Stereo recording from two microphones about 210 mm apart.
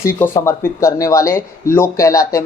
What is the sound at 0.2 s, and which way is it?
Speech, 10° left (ahead or behind).